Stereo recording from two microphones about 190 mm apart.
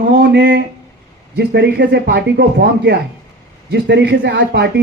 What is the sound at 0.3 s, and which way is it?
Speech, 65° right (ahead or behind).